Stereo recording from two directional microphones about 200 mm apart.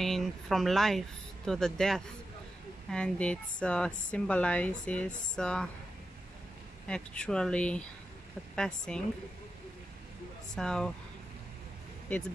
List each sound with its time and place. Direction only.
0.0 s speech: centre (ahead or behind)
6.9 s speech: 5° left (ahead or behind)
10.5 s speech: 5° left (ahead or behind)